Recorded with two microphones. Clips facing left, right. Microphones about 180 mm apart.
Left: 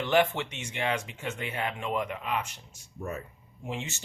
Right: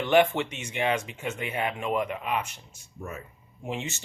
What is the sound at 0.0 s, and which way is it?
Speech, 20° right (ahead or behind).